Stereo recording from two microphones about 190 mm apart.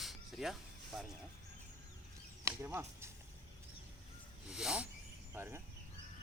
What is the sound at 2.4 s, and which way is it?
Speech, 15° right (ahead or behind).